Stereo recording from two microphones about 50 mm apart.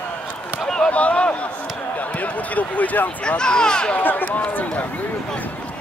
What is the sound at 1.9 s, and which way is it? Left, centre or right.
Basketball bounce, left.